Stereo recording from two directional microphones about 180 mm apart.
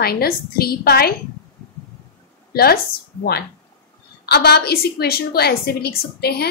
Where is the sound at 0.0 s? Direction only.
60° left (ahead or behind).